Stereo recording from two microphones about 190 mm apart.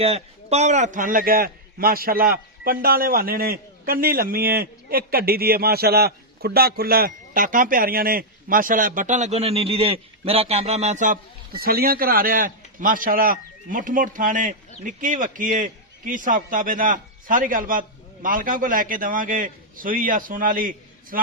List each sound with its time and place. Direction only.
0.0 s a man's voice: 35° right (ahead or behind)